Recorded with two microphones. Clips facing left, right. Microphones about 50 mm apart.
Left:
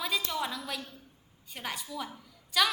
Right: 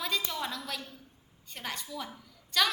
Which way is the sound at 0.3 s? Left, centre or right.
Centre.